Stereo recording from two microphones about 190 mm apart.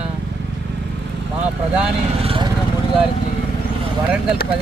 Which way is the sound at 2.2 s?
30° right (ahead or behind).